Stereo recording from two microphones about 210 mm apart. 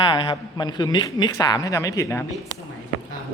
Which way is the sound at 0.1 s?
20° left (ahead or behind).